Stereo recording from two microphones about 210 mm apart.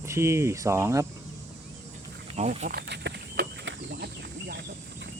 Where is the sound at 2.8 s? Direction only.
55° right (ahead or behind).